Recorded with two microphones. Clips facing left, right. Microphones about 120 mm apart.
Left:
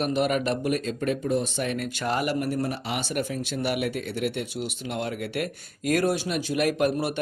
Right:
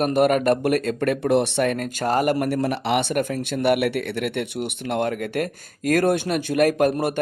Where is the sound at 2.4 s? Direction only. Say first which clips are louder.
Right 5 dB; 75° right (ahead or behind); by 7.1 s 45° right (ahead or behind).